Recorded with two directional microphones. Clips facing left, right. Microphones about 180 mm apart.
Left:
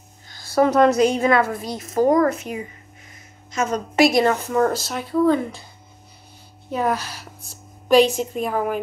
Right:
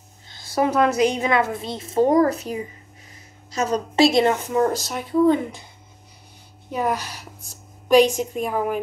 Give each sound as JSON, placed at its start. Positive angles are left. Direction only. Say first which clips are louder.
{"t": 0.3, "sound": "a sound", "louder": "left 4 dB", "side_deg": -20}
{"t": 0.8, "sound": "a woman's voice", "louder": "left 3 dB", "side_deg": -15}
{"t": 6.7, "sound": "a woman's voice", "louder": "left 1 dB", "side_deg": -15}